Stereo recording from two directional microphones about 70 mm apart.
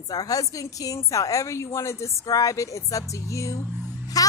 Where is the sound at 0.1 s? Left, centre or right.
Left.